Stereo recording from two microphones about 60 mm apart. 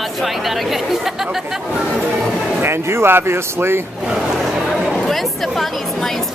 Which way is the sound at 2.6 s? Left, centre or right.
Right.